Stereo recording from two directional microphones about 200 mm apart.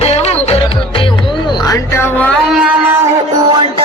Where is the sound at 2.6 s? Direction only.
10° right (ahead or behind).